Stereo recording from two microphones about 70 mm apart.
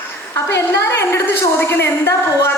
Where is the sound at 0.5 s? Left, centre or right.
Left.